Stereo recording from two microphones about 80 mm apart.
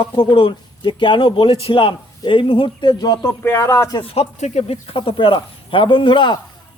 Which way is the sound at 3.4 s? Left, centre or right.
Left.